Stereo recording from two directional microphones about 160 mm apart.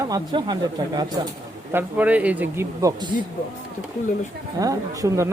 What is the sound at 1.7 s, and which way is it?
Speech, 10° right (ahead or behind).